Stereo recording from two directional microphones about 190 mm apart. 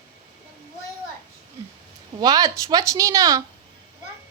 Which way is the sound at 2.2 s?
20° right (ahead or behind).